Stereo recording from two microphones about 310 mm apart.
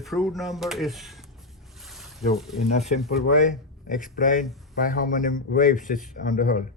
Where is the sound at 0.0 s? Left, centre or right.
Centre.